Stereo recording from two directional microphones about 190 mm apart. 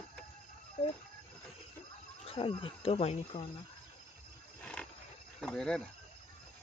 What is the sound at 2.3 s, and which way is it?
Speech, 30° left (ahead or behind).